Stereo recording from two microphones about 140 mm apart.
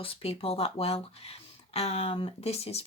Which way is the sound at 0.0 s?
45° left (ahead or behind).